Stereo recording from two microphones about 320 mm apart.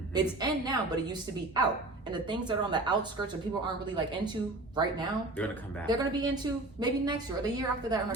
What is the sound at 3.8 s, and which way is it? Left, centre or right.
Speech, centre.